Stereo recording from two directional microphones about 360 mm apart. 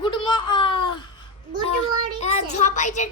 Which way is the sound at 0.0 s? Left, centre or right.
Centre.